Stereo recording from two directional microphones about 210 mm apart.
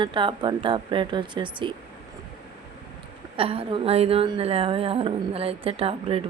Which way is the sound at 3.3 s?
25° right (ahead or behind).